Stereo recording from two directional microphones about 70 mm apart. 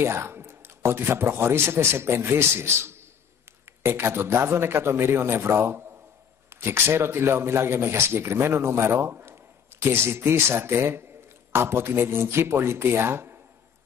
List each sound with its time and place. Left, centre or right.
0.0 s speech: right